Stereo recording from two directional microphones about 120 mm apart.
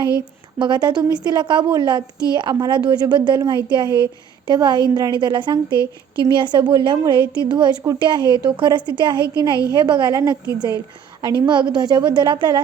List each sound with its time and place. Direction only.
0.6 s a woman's voice: 40° right (ahead or behind)